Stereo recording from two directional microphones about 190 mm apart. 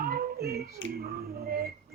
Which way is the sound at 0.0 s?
55° right (ahead or behind).